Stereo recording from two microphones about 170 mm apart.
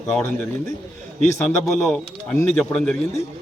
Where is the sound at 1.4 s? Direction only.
5° left (ahead or behind).